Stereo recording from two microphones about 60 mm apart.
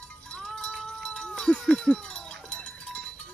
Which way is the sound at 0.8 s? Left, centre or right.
Centre.